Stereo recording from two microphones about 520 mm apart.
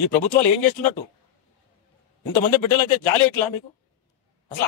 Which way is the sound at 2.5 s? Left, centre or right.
Left.